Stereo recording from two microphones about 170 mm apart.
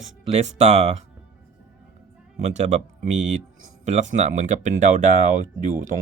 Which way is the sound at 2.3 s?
40° right (ahead or behind).